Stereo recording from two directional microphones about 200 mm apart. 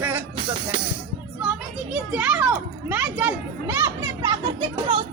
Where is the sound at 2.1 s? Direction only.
5° right (ahead or behind).